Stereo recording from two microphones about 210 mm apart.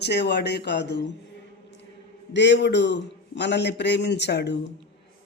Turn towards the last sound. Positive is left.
turn(degrees=55)  # may be behind; listen again after turning